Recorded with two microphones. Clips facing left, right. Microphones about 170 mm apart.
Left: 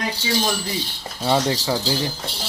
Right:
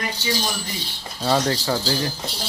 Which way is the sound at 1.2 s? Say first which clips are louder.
Left 1 dB; 10° left (ahead or behind).